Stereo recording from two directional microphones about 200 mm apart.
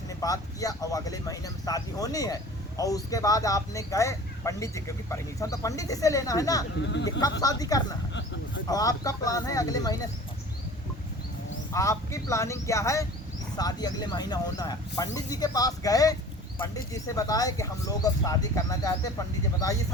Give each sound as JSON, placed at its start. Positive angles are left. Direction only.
{"t": 0.2, "sound": "speech", "side_deg": 15}
{"t": 11.7, "sound": "speech", "side_deg": 15}